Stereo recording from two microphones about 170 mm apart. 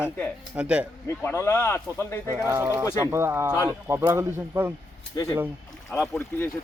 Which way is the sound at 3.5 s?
15° left (ahead or behind).